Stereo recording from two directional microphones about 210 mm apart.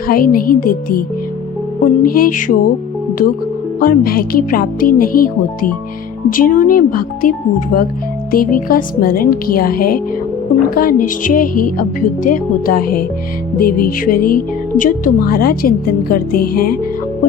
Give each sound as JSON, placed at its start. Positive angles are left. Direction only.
{"t": 0.1, "sound": "speech", "side_deg": 45}
{"t": 3.8, "sound": "speech", "side_deg": 45}
{"t": 6.3, "sound": "speech", "side_deg": 40}